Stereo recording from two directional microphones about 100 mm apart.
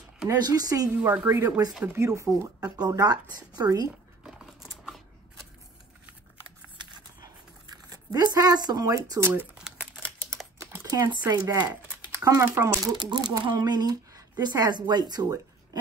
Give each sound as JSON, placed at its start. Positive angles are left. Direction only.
{"t": 0.3, "sound": "speech", "side_deg": -40}
{"t": 0.8, "sound": "a woman's voice", "side_deg": -10}
{"t": 4.2, "sound": "a sound", "side_deg": -5}
{"t": 7.7, "sound": "speech", "side_deg": -40}
{"t": 9.2, "sound": "speech", "side_deg": -25}
{"t": 9.6, "sound": "crumpling", "side_deg": -5}
{"t": 10.6, "sound": "a sound", "side_deg": -35}
{"t": 11.2, "sound": "speech", "side_deg": -35}
{"t": 12.9, "sound": "speech", "side_deg": -45}